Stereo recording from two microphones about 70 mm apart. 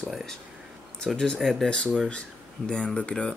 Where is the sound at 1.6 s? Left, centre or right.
Centre.